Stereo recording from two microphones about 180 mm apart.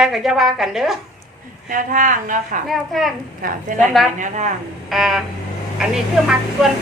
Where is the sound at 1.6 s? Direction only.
50° right (ahead or behind).